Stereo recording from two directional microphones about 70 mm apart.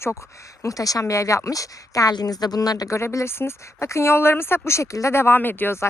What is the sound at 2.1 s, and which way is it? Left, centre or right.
Speech, left.